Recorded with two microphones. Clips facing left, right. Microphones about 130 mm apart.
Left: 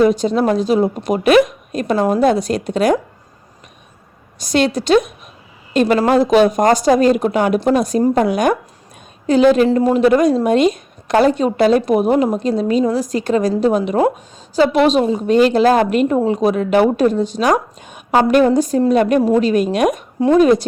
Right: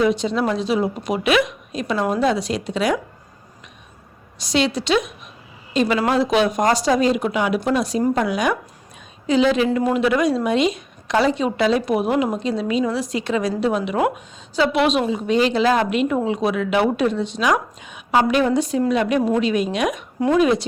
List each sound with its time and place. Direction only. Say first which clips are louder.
0.0 s a woman's voice: left 5 dB; 45° left (ahead or behind)
4.4 s a woman's voice: left 4 dB; 50° left (ahead or behind)
20.1 s a woman's voice: left 5 dB; 30° left (ahead or behind)
20.4 s a woman's voice: left 6 dB; 45° left (ahead or behind)